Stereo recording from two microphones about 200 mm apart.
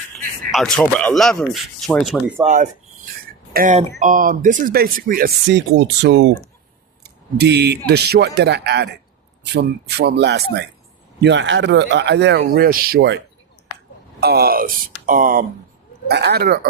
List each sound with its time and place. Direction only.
0.5 s speech: 5° left (ahead or behind)
2.4 s speech: 40° right (ahead or behind); by 6.3 s 60° right (ahead or behind)
7.0 s a sound: 55° right (ahead or behind)
7.9 s speech: 55° right (ahead or behind)
12.4 s speech: 45° right (ahead or behind)
14.2 s speech: 50° right (ahead or behind)
16.0 s speech: 55° right (ahead or behind)